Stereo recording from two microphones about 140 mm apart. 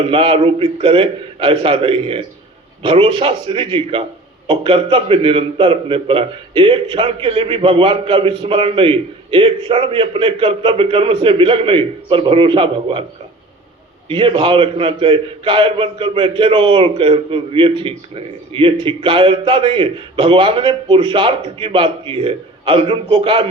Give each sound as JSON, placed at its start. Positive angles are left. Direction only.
{"t": 0.0, "sound": "a man's voice", "side_deg": -40}
{"t": 14.1, "sound": "a man's voice", "side_deg": -40}